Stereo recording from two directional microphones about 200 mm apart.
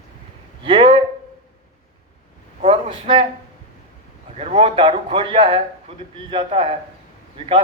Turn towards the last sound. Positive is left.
turn(degrees=-30)  # may be behind; listen again after turning